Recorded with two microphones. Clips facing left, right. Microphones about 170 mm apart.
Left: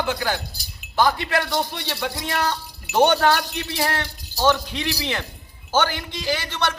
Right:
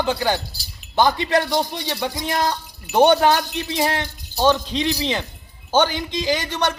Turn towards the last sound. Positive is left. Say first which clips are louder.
# right 3 dB
turn(degrees=-15)  # may be behind; listen again after turning